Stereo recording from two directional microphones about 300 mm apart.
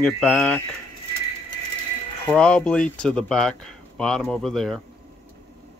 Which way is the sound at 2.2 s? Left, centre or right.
Centre.